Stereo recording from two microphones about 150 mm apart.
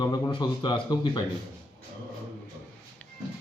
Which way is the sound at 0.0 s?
30° left (ahead or behind).